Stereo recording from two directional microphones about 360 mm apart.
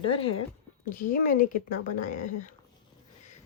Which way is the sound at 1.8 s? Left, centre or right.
Left.